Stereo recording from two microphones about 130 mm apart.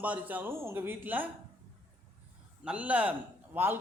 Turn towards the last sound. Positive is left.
turn(degrees=-15)  # may be behind; listen again after turning